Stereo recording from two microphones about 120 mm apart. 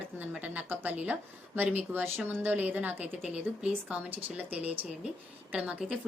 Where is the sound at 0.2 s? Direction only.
15° right (ahead or behind).